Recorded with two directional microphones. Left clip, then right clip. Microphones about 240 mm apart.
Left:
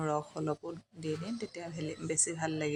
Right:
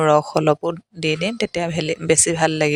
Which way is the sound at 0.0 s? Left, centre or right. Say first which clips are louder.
Right 19 dB; right.